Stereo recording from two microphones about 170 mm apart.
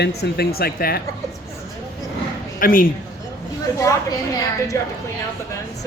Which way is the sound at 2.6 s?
55° left (ahead or behind).